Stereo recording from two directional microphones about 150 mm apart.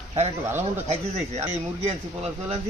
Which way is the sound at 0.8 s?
45° right (ahead or behind).